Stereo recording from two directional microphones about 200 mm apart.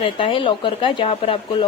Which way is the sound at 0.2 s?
25° left (ahead or behind).